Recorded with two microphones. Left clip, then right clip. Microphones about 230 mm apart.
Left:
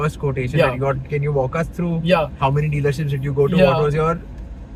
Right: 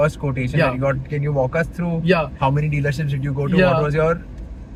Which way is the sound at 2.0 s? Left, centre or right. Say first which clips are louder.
Left 1 dB; centre.